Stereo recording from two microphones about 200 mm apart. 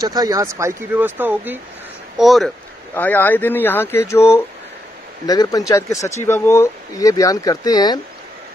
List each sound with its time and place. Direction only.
0.0 s speech: 20° right (ahead or behind); by 8.0 s 20° left (ahead or behind)